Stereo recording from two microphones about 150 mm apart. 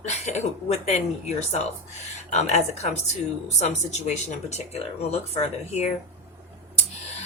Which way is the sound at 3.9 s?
50° left (ahead or behind).